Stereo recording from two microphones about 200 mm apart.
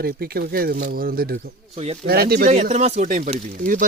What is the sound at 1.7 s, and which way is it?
Speech, 30° right (ahead or behind).